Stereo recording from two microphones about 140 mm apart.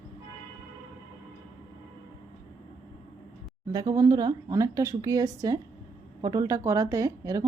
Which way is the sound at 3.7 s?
25° right (ahead or behind).